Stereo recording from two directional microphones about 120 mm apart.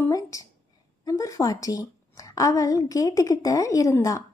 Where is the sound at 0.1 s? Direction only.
30° left (ahead or behind).